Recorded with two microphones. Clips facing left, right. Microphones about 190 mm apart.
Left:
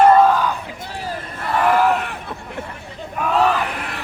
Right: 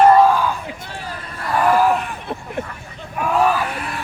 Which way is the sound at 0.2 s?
10° right (ahead or behind).